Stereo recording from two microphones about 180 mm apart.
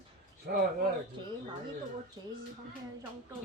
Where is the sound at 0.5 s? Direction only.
55° right (ahead or behind).